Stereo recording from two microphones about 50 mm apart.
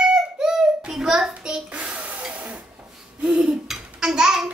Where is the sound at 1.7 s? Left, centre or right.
Right.